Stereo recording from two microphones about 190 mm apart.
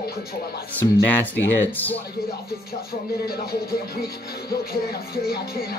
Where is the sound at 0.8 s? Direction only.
10° left (ahead or behind).